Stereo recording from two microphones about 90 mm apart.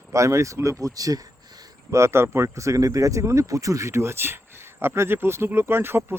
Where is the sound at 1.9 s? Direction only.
30° right (ahead or behind).